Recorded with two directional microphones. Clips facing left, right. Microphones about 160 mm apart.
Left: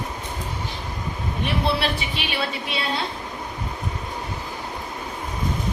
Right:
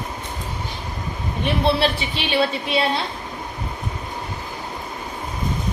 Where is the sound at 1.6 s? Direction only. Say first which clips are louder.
Right 6 dB; 30° right (ahead or behind).